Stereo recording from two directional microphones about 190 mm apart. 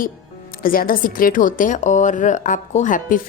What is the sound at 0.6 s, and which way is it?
A woman's voice, 50° left (ahead or behind).